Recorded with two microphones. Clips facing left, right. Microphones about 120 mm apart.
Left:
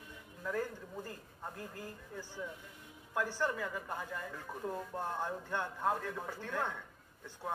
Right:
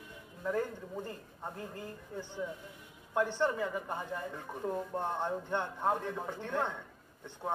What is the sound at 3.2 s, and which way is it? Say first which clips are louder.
A man's voice: right 5 dB; 25° right (ahead or behind).